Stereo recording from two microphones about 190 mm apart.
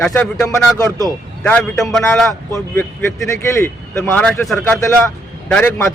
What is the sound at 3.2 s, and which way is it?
A man's voice, 15° left (ahead or behind).